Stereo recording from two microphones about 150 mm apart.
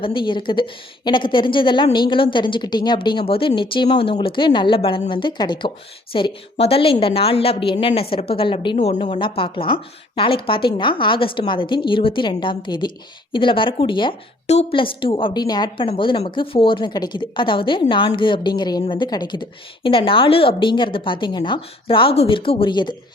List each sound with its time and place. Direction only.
0.0 s a woman's voice: 35° left (ahead or behind)
14.4 s a woman's voice: 45° left (ahead or behind)